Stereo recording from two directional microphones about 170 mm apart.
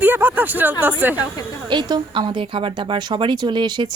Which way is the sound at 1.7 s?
25° right (ahead or behind).